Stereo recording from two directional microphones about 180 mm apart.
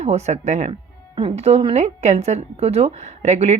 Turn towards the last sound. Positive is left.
turn(degrees=-40)  # may be behind; listen again after turning